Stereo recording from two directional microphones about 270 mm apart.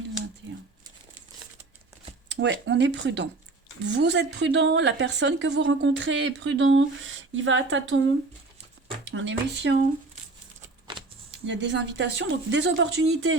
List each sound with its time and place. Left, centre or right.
2.3 s speech: right
9.0 s speech: right
11.4 s speech: right